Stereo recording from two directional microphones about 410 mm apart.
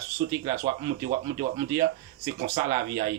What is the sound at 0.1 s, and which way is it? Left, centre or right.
Speech, centre.